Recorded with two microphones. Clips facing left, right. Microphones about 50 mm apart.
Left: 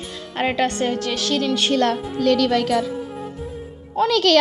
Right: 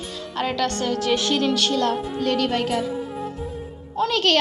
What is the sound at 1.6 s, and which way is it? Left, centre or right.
Speech, left.